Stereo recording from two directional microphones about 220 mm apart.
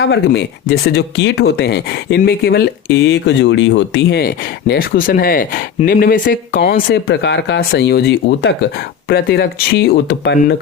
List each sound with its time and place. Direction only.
0.0 s speech: 50° left (ahead or behind)